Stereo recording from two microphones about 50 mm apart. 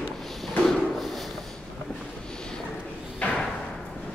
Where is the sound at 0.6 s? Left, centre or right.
Centre.